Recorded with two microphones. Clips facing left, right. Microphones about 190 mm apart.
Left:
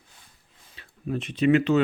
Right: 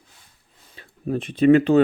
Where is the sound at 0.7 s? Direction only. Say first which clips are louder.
Right 4 dB; 40° right (ahead or behind).